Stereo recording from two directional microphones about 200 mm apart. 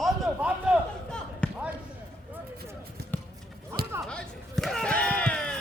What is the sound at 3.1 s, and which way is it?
Basketball bounce, 10° left (ahead or behind).